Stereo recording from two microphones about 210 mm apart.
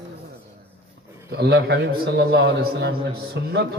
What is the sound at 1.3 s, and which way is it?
A man's voice, 50° right (ahead or behind).